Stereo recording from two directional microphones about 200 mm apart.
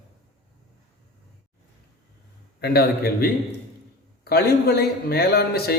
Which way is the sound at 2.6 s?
50° left (ahead or behind).